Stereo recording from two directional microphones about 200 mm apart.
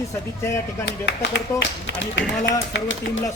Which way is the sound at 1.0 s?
60° left (ahead or behind).